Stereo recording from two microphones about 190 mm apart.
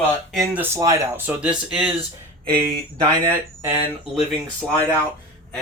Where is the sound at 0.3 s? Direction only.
10° right (ahead or behind).